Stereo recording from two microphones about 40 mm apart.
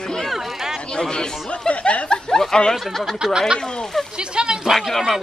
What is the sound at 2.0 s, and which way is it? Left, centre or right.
Speech, centre.